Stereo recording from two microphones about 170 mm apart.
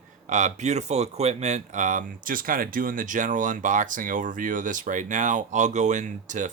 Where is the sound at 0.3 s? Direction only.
45° right (ahead or behind).